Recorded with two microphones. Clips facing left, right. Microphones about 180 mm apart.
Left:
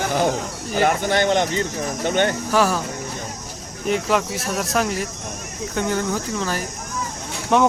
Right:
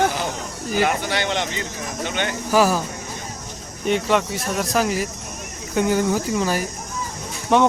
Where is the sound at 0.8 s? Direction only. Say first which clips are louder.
Left 3 dB; 50° left (ahead or behind).